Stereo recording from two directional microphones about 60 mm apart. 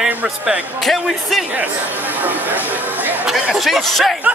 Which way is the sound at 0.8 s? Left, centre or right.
Centre.